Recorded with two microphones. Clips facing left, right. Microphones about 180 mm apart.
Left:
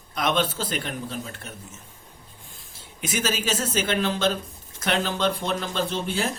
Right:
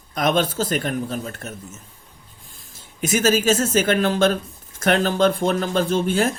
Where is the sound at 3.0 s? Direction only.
45° right (ahead or behind).